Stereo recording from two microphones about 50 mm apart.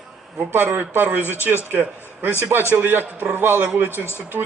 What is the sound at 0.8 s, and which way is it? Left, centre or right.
A man's voice, right.